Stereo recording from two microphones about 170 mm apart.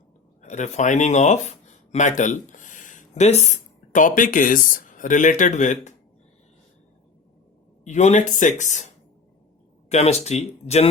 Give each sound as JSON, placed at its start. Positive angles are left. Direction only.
{"t": 0.4, "sound": "speech", "side_deg": 45}
{"t": 7.9, "sound": "speech", "side_deg": 45}
{"t": 9.9, "sound": "speech", "side_deg": 40}